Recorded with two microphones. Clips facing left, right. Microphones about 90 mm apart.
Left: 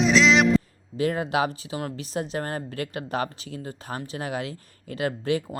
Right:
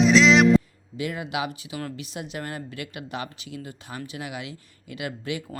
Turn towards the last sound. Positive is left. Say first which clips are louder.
# left 6 dB
turn(degrees=35)  # may be behind; listen again after turning